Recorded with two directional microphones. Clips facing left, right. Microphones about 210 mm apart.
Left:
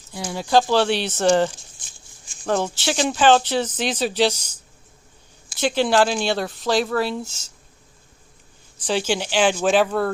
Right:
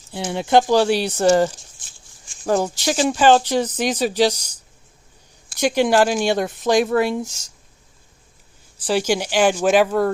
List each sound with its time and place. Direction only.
0.1 s speech: 25° right (ahead or behind)
0.8 s speech: 10° right (ahead or behind)
5.5 s speech: 10° right (ahead or behind)
8.9 s speech: 10° right (ahead or behind)